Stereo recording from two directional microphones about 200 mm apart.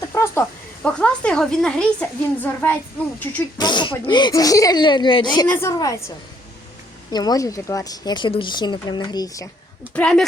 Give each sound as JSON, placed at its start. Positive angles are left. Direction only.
{"t": 0.1, "sound": "speech", "side_deg": 15}
{"t": 3.6, "sound": "a woman's voice", "side_deg": 20}
{"t": 7.1, "sound": "speech", "side_deg": 20}
{"t": 9.9, "sound": "speech", "side_deg": 5}